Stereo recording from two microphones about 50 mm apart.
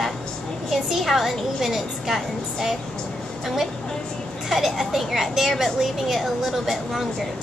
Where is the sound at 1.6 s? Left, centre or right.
Centre.